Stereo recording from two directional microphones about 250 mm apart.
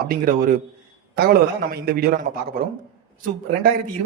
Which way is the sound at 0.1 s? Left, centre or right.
Right.